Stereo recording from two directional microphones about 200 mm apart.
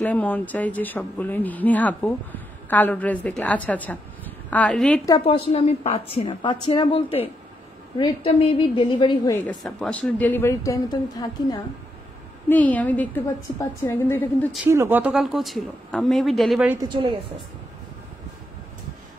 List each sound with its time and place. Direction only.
0.0 s a woman's voice: 10° left (ahead or behind)
5.2 s a woman's voice: 30° left (ahead or behind)
9.5 s speech: 5° left (ahead or behind)
12.4 s speech: 10° left (ahead or behind)
14.7 s a woman's voice: 10° right (ahead or behind)
16.8 s a woman's voice: 25° right (ahead or behind)